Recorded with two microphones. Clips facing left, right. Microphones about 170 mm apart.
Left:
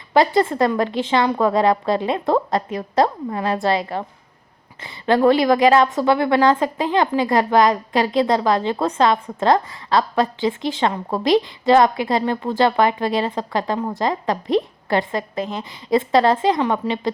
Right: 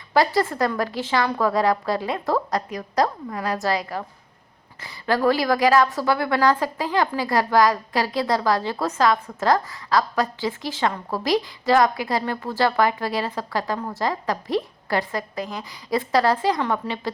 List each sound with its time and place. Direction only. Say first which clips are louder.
0.1 s a woman's voice: left 4 dB; 25° left (ahead or behind)